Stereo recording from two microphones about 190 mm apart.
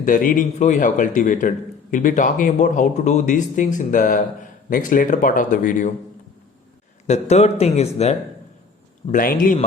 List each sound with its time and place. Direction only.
0.0 s speech: 45° left (ahead or behind)
7.1 s a man's voice: 35° left (ahead or behind)
9.1 s speech: 50° left (ahead or behind)